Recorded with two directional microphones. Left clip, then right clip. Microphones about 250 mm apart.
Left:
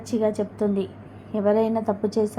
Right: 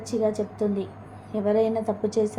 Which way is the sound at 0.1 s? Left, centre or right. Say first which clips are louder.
Left 1 dB; centre.